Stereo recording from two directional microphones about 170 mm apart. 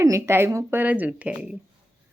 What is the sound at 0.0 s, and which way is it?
Speech, 15° right (ahead or behind).